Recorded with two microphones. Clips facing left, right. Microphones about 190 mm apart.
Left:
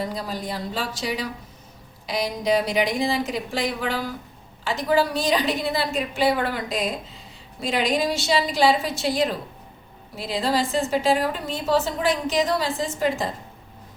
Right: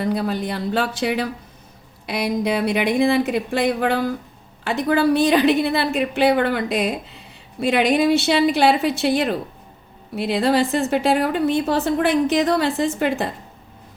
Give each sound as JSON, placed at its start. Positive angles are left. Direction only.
{"t": 0.0, "sound": "a woman's voice", "side_deg": -60}